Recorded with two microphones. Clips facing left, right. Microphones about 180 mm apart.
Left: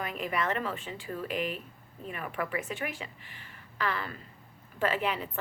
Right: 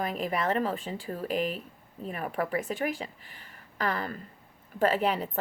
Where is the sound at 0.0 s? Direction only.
40° right (ahead or behind).